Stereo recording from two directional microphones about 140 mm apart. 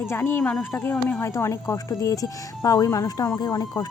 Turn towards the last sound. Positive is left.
turn(degrees=30)  # may be behind; listen again after turning